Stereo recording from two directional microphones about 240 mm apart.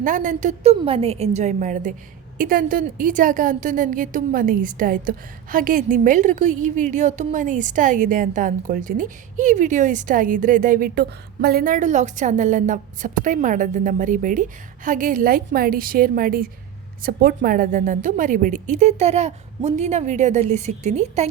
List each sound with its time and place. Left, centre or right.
0.0 s a woman's voice: right